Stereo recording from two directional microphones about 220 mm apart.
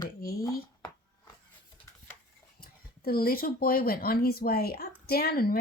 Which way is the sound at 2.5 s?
40° left (ahead or behind).